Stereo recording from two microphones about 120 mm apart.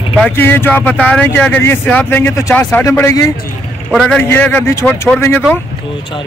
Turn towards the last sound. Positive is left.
turn(degrees=20)  # may be behind; listen again after turning